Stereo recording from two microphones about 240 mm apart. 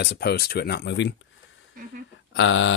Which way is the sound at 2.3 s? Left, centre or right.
Left.